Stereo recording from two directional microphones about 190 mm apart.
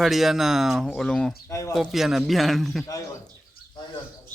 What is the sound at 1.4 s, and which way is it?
Bird, 15° left (ahead or behind).